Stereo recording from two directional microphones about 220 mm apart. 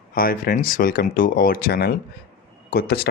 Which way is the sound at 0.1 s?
40° left (ahead or behind).